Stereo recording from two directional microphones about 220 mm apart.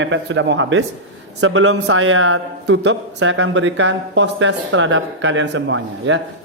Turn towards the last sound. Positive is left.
turn(degrees=-55)  # may be behind; listen again after turning